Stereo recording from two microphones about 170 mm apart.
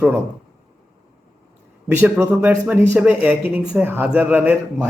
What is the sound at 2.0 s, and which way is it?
A man's voice, 10° right (ahead or behind).